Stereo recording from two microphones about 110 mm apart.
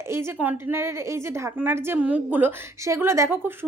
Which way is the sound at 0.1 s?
25° right (ahead or behind).